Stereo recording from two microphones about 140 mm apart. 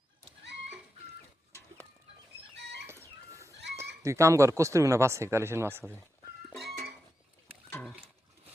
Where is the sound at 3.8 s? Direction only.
20° right (ahead or behind).